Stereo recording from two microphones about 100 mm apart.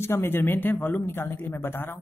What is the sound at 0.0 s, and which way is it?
Speech, 25° left (ahead or behind).